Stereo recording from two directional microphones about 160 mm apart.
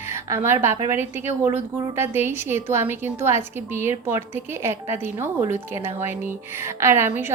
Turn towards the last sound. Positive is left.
turn(degrees=-15)  # may be behind; listen again after turning